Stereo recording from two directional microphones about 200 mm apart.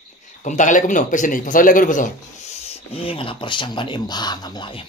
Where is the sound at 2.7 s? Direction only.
30° left (ahead or behind).